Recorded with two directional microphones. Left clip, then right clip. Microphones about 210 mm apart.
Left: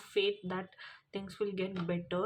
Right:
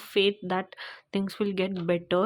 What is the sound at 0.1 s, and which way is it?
Speech, 45° right (ahead or behind).